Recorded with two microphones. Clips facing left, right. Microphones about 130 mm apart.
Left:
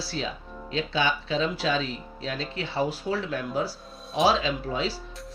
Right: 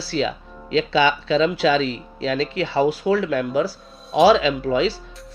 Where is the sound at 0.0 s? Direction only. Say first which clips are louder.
Right 9 dB; 85° right.